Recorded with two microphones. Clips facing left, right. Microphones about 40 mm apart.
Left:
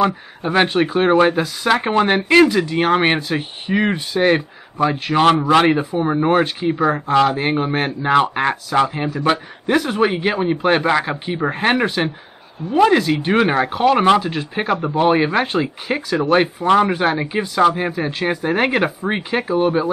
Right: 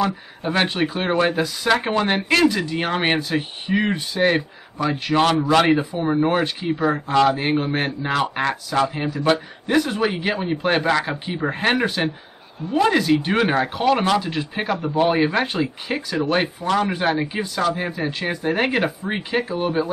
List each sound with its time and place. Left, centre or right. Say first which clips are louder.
0.4 s speech: left 5 dB; centre
8.1 s speech: left 7 dB; left
8.9 s speech: left 3 dB; centre
9.2 s speech: left 1 dB; centre
16.6 s speech: left 4 dB; left